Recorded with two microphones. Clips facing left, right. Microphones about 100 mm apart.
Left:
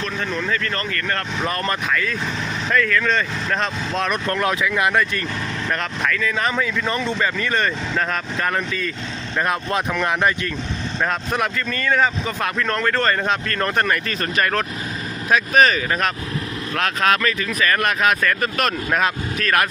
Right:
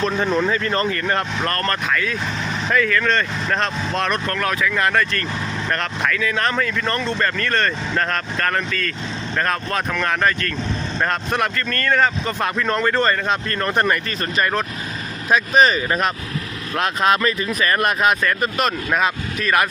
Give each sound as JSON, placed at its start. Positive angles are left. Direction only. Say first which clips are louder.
{"t": 0.0, "sound": "speech", "louder": "right 6 dB", "side_deg": -25}
{"t": 1.5, "sound": "speech", "louder": "right 1 dB", "side_deg": 10}
{"t": 1.9, "sound": "speech", "louder": "right 1 dB", "side_deg": 0}
{"t": 4.3, "sound": "speech", "louder": "left 1 dB", "side_deg": 20}
{"t": 4.7, "sound": "speech", "louder": "even", "side_deg": 10}
{"t": 6.0, "sound": "speech", "louder": "right 1 dB", "side_deg": 0}
{"t": 11.0, "sound": "speech", "louder": "right 1 dB", "side_deg": 0}
{"t": 13.8, "sound": "speech", "louder": "right 1 dB", "side_deg": -20}
{"t": 17.0, "sound": "speech", "louder": "right 2 dB", "side_deg": -30}
{"t": 18.9, "sound": "speech", "louder": "even", "side_deg": -5}